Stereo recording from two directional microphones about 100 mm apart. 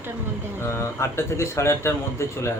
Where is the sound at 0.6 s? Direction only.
25° left (ahead or behind).